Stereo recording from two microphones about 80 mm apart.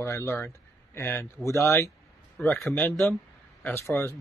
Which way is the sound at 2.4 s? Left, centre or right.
Centre.